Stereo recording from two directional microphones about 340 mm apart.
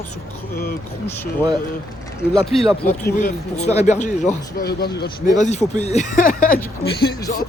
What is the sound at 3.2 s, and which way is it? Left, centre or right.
Speech, centre.